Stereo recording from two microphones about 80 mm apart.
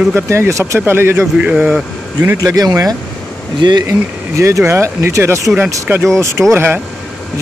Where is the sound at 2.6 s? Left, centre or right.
Right.